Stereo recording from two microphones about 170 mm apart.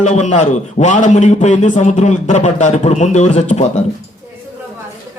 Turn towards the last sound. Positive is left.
turn(degrees=45)  # may be behind; listen again after turning